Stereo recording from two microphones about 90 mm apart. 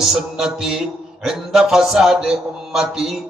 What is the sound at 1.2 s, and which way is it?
Speech, 5° right (ahead or behind).